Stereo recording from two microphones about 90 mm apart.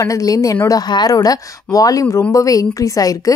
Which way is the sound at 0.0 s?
40° left (ahead or behind).